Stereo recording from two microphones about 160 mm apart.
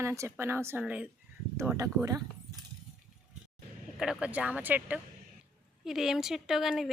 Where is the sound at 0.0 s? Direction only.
15° right (ahead or behind).